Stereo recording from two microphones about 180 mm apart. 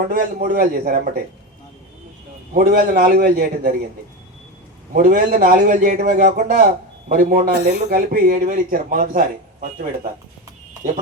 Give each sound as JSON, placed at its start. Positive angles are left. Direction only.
{"t": 0.1, "sound": "speech", "side_deg": -50}
{"t": 2.6, "sound": "a man's voice", "side_deg": -60}
{"t": 4.9, "sound": "speech", "side_deg": -50}